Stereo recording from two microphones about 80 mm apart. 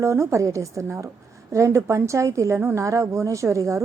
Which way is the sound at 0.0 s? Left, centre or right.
Right.